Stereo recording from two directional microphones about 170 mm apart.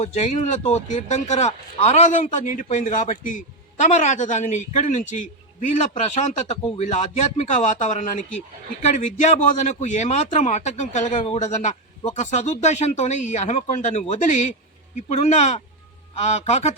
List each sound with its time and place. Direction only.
0.0 s a man's voice: 45° left (ahead or behind)